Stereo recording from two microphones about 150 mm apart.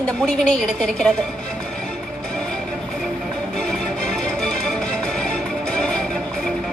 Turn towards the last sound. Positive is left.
turn(degrees=5)  # may be behind; listen again after turning